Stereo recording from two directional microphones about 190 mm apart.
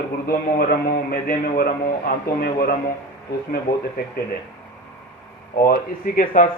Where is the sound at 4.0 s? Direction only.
55° left (ahead or behind).